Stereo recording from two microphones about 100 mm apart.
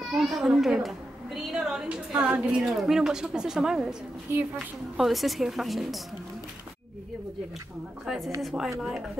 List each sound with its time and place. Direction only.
0.2 s a woman's voice: centre (ahead or behind)
4.3 s a woman's voice: 20° right (ahead or behind)
4.9 s a woman's voice: centre (ahead or behind)
8.4 s a woman's voice: centre (ahead or behind)